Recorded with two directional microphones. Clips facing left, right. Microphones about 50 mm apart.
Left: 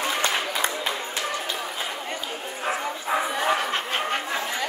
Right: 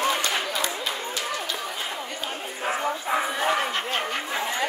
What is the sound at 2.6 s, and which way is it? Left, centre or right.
Bow-wow, centre.